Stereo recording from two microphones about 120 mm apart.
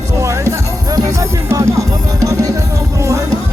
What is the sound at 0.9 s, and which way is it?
Music, 30° right (ahead or behind).